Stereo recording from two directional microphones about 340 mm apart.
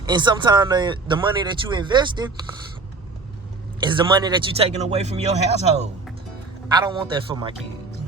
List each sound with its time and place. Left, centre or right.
0.1 s speech: centre
3.8 s speech: centre